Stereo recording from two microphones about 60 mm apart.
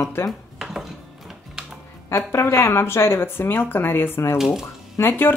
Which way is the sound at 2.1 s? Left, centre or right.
Left.